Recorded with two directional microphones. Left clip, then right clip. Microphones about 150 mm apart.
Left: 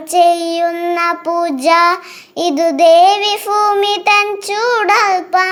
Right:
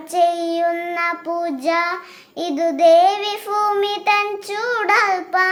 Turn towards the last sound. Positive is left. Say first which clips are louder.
# left 5 dB
turn(degrees=35)  # may be behind; listen again after turning